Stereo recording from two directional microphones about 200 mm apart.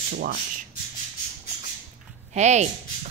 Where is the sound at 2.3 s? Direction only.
35° right (ahead or behind).